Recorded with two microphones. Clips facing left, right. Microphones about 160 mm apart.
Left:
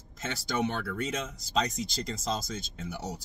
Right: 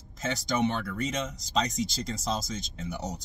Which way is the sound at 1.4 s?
Centre (ahead or behind).